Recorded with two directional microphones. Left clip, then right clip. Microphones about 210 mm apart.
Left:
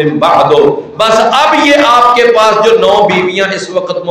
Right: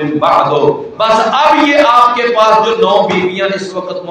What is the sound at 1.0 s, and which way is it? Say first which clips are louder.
A man's voice: left 3 dB; 45° left (ahead or behind).